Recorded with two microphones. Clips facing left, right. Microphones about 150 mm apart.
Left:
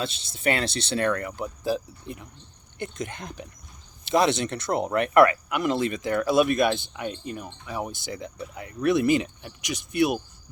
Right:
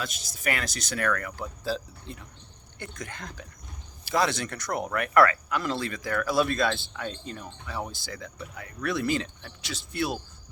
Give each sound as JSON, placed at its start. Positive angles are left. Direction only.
{"t": 0.0, "sound": "speech", "side_deg": 25}